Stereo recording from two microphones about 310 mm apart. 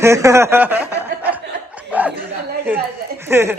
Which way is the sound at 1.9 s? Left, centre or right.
Centre.